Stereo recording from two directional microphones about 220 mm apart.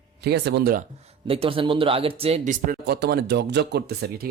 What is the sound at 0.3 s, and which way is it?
Speech, 50° right (ahead or behind).